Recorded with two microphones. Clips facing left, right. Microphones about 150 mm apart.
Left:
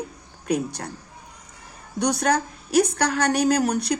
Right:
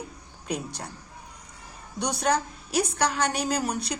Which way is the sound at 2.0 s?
55° left (ahead or behind).